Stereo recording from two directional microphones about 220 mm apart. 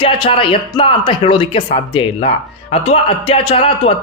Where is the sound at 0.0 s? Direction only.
25° left (ahead or behind).